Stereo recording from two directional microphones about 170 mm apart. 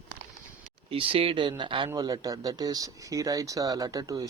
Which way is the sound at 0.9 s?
35° right (ahead or behind).